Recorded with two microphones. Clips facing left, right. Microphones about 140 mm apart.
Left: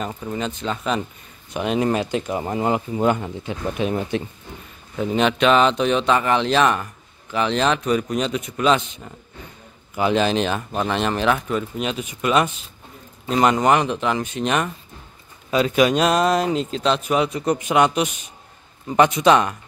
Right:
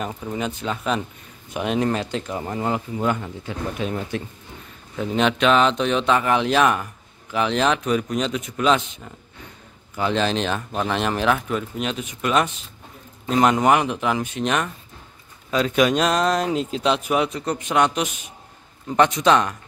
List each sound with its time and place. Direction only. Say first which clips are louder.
0.0 s speech: even; 5° right (ahead or behind)
1.9 s speech: left 3 dB; 10° left (ahead or behind)
4.9 s speech: left 1 dB; 5° left (ahead or behind)
17.3 s a man's voice: left 4 dB; 10° left (ahead or behind)